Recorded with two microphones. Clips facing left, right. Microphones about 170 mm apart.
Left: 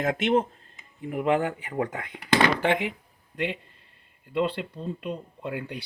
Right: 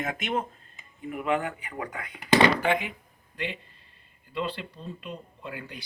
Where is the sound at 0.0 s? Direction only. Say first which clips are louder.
Left 6 dB; 70° left (ahead or behind).